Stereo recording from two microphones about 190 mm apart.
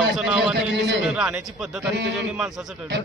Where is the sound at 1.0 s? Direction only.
5° right (ahead or behind).